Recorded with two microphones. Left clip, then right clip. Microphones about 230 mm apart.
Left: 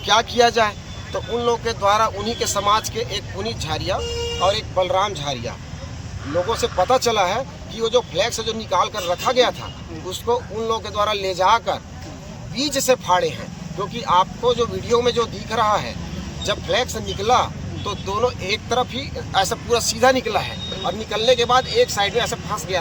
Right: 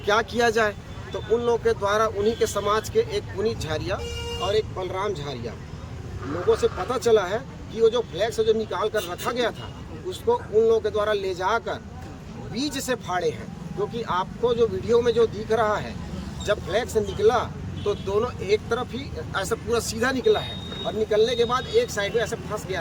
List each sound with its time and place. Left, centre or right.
0.0 s speech: centre
6.6 s speech: centre